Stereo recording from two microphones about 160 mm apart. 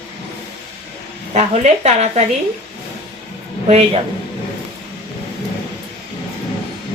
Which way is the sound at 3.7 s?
40° right (ahead or behind).